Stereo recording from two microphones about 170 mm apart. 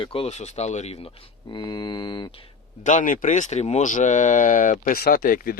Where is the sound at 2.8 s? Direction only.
50° left (ahead or behind).